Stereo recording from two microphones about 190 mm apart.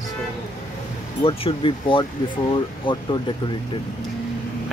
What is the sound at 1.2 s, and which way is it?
Speech, 30° left (ahead or behind).